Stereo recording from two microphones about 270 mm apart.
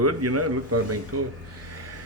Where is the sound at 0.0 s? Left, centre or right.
Right.